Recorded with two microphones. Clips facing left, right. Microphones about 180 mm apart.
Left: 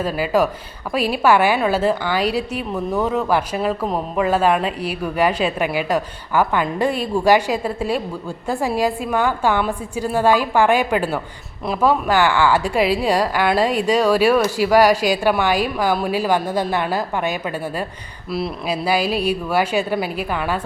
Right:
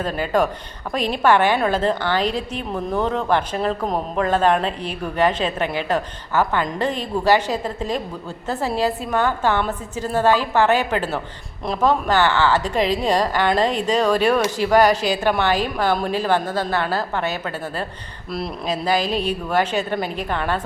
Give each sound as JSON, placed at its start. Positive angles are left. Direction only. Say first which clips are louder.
{"t": 0.0, "sound": "a woman's voice", "louder": "left 2 dB", "side_deg": 5}